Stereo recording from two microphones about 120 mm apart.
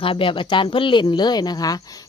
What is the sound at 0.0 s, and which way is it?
Speech, 45° left (ahead or behind).